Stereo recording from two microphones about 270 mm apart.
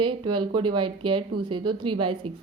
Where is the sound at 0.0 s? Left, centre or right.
Centre.